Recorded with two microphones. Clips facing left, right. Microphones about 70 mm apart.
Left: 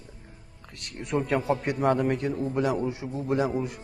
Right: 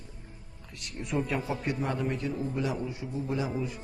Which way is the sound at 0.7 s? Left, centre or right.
Left.